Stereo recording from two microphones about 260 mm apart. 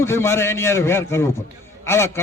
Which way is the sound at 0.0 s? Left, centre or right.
Centre.